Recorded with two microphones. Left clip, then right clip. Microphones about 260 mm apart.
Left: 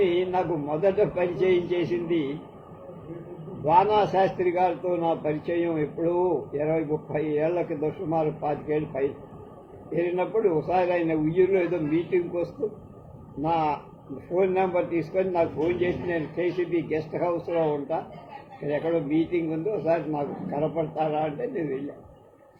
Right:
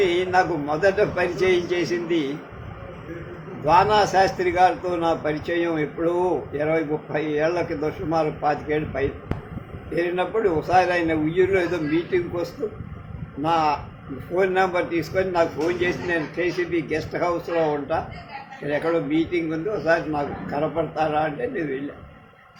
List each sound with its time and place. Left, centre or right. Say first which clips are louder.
0.0 s a man's voice: right 4 dB; right
3.6 s a man's voice: right 3 dB; right
13.4 s a man's voice: right 4 dB; right